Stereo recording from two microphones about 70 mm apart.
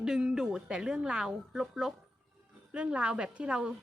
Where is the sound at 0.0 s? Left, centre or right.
Centre.